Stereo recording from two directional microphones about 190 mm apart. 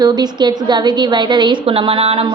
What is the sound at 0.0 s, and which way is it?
A woman's voice, 20° right (ahead or behind).